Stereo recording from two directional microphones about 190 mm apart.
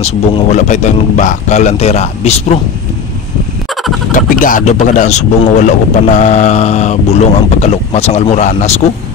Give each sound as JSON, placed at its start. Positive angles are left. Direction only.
{"t": 0.0, "sound": "speech", "side_deg": 35}
{"t": 4.1, "sound": "speech", "side_deg": 45}